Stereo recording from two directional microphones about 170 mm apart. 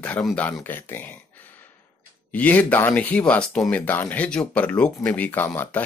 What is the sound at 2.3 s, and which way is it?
Speech, 10° left (ahead or behind).